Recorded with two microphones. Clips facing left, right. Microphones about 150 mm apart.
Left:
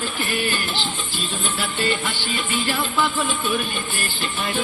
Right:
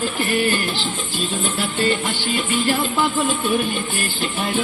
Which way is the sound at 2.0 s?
45° right (ahead or behind).